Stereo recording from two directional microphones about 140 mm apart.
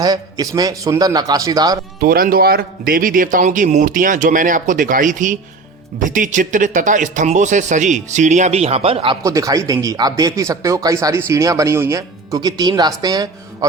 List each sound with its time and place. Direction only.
0.0 s speech: 30° right (ahead or behind)
2.0 s a man's voice: 90° right; by 9.1 s 40° right (ahead or behind)
9.2 s speech: 25° right (ahead or behind)